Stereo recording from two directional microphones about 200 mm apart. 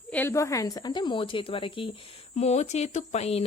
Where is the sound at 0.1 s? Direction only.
10° left (ahead or behind).